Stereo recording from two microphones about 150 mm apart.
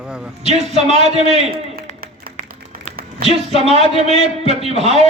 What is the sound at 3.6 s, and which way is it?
A man's voice, 45° right (ahead or behind).